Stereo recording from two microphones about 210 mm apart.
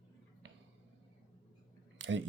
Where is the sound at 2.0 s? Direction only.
60° right (ahead or behind).